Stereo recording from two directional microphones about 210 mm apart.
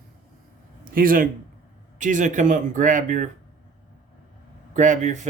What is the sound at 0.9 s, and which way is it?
Speech, 40° right (ahead or behind).